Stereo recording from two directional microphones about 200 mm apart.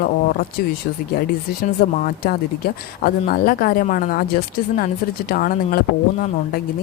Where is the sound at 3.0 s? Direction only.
50° left (ahead or behind).